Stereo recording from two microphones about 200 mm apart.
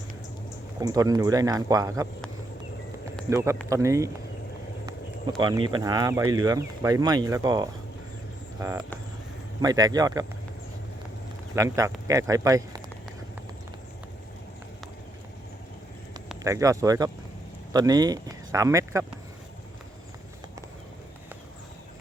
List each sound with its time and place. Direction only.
0.8 s speech: 15° right (ahead or behind)
3.2 s speech: 15° right (ahead or behind)
5.4 s speech: 25° right (ahead or behind)
8.5 s vehicle: 15° right (ahead or behind)
9.6 s speech: 20° right (ahead or behind)
11.5 s speech: 15° right (ahead or behind)
16.4 s speech: 15° right (ahead or behind)